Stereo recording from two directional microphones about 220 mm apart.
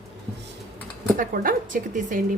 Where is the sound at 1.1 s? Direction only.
40° right (ahead or behind).